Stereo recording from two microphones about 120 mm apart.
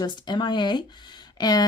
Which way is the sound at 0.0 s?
40° left (ahead or behind).